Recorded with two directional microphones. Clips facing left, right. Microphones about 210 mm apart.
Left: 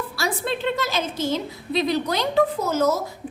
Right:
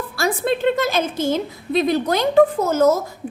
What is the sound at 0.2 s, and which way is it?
A woman's voice, 50° right (ahead or behind).